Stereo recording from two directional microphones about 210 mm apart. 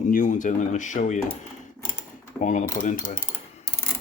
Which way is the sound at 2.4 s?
35° left (ahead or behind).